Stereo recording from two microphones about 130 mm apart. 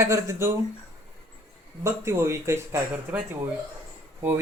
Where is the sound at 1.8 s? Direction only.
20° right (ahead or behind).